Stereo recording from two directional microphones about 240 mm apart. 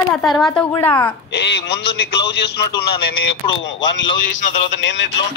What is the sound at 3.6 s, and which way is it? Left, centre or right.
Speech, left.